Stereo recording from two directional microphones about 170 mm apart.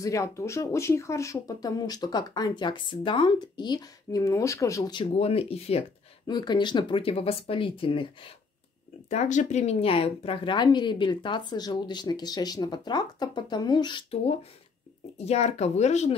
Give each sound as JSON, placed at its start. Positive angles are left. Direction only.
{"t": 0.0, "sound": "speech", "side_deg": 20}
{"t": 5.2, "sound": "speech", "side_deg": 35}
{"t": 9.1, "sound": "speech", "side_deg": 45}
{"t": 15.1, "sound": "speech", "side_deg": 40}